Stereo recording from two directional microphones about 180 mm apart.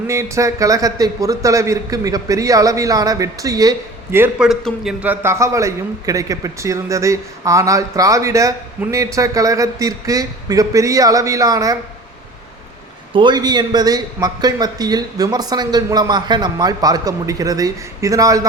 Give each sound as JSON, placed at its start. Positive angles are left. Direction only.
{"t": 0.1, "sound": "a man's voice", "side_deg": -15}
{"t": 4.4, "sound": "a man's voice", "side_deg": 0}
{"t": 13.1, "sound": "a man's voice", "side_deg": -25}